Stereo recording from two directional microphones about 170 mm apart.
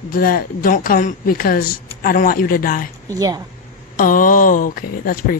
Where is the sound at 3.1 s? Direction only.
20° right (ahead or behind).